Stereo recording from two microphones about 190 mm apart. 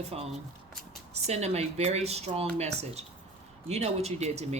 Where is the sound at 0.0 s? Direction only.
35° right (ahead or behind).